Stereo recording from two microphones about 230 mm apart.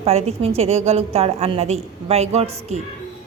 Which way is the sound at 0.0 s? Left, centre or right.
Right.